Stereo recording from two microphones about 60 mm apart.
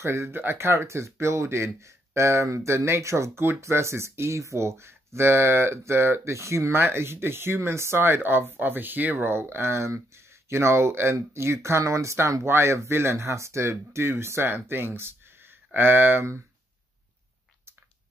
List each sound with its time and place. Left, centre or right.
0.0 s speech: right